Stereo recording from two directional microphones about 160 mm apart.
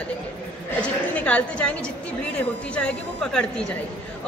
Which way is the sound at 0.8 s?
10° left (ahead or behind).